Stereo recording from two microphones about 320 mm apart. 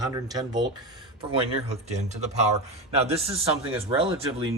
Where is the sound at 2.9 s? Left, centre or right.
Centre.